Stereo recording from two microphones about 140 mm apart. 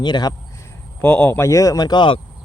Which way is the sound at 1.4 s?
25° left (ahead or behind).